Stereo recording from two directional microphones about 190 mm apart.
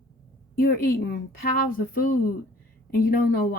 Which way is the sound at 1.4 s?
50° left (ahead or behind).